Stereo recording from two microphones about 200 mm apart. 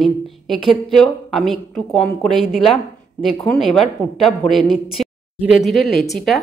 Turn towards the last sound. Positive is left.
turn(degrees=0)  # may be behind; listen again after turning